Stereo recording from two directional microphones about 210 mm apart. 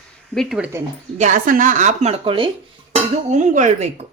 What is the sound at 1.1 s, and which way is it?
Speech, 35° right (ahead or behind).